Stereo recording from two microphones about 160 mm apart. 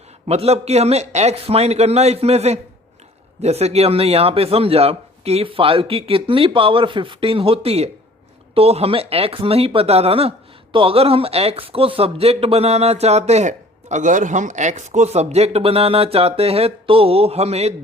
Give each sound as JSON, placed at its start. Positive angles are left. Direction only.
{"t": 0.3, "sound": "speech", "side_deg": -40}